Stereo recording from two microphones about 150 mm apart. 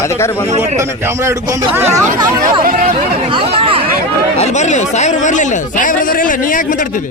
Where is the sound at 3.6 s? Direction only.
40° right (ahead or behind).